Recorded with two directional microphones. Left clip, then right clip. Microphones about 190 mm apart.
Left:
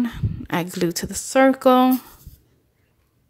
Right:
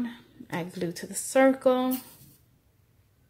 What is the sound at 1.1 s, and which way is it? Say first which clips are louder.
Speech: left 4 dB; 25° left (ahead or behind).